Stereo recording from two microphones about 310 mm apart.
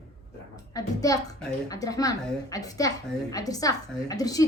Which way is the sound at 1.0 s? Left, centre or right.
Centre.